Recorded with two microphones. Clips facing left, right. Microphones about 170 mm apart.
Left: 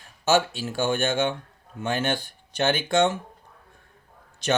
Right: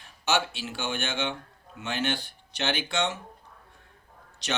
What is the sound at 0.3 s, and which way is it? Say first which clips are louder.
Speech: left 6 dB; 45° left (ahead or behind).